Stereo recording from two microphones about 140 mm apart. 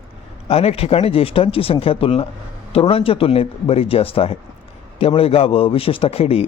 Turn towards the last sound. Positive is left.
turn(degrees=45)  # may be behind; listen again after turning